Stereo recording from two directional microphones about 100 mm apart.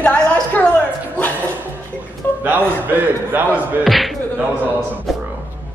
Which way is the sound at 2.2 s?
20° left (ahead or behind).